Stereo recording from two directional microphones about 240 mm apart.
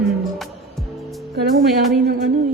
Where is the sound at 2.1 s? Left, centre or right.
Right.